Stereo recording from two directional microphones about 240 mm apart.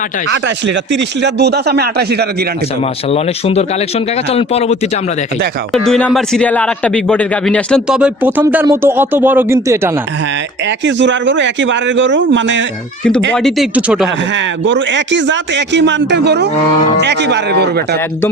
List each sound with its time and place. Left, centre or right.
0.3 s speech: right
3.1 s speech: left
5.7 s speech: centre
10.7 s speech: right
13.3 s speech: centre
14.3 s speech: right